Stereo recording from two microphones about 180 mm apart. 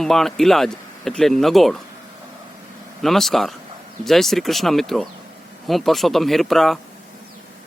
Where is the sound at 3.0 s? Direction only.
Centre (ahead or behind).